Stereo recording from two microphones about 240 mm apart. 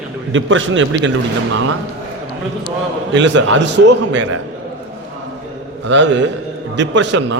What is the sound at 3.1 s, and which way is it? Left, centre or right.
A man's voice, right.